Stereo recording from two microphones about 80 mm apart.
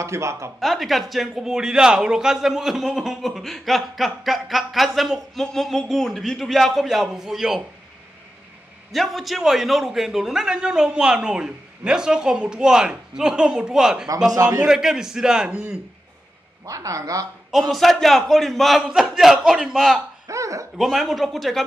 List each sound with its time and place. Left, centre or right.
0.0 s speech: right
0.6 s a man's voice: centre
8.9 s a man's voice: centre
14.3 s speech: right
14.6 s a man's voice: centre
16.6 s speech: right
17.5 s a man's voice: centre
20.2 s a sound: right
20.7 s a man's voice: centre